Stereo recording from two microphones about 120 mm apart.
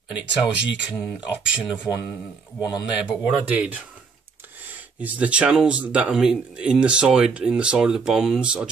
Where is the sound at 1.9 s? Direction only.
30° left (ahead or behind).